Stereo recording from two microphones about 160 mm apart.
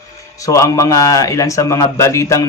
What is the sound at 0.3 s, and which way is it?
A man's voice, 20° left (ahead or behind).